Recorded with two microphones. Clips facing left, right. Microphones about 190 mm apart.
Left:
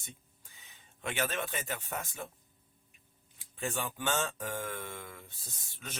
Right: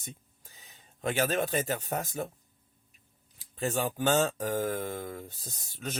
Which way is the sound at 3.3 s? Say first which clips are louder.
Right 6 dB; 35° right (ahead or behind).